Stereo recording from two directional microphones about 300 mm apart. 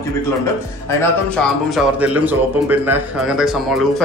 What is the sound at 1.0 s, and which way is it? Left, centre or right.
Speech, centre.